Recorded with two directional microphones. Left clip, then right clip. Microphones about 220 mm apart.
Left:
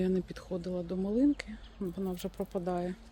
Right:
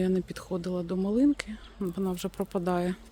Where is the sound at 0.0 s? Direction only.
15° right (ahead or behind); by 3.0 s 35° right (ahead or behind).